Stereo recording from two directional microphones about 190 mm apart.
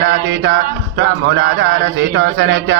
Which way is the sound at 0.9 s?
70° right (ahead or behind).